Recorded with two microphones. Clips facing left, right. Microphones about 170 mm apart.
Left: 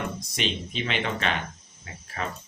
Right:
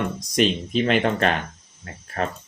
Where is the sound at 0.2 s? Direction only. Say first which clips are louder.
Right 9 dB; 45° right (ahead or behind).